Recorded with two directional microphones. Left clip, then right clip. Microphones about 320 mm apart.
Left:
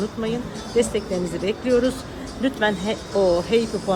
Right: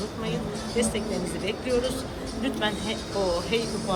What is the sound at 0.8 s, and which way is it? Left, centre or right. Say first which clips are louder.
Speech: left 7 dB; left.